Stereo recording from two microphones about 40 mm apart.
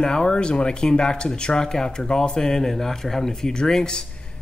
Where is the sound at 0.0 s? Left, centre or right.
Centre.